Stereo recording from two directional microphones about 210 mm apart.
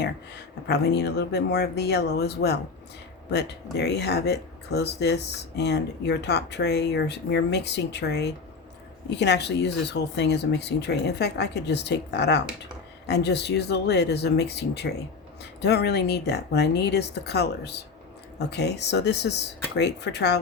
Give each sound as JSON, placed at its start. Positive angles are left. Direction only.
{"t": 0.0, "sound": "speech", "side_deg": 50}